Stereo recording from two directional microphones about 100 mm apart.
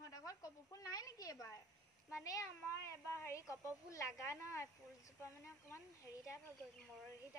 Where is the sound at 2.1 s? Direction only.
35° left (ahead or behind).